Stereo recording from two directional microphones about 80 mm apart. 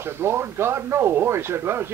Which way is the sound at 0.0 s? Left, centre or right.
Right.